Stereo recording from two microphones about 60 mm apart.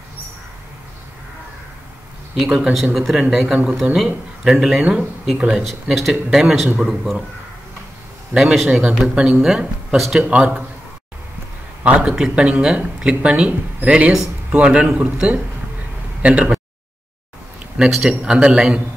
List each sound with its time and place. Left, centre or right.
2.3 s speech: centre
5.6 s speech: centre
8.3 s speech: centre
10.2 s speech: centre
11.8 s a man's voice: right
16.2 s speech: centre
17.8 s speech: centre